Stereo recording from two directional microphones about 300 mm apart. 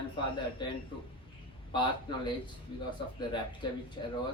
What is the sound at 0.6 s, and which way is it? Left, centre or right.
Speech, centre.